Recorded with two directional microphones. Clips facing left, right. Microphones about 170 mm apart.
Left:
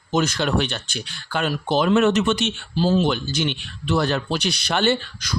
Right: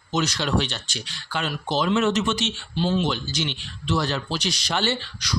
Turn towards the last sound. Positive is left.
turn(degrees=50)  # may be behind; listen again after turning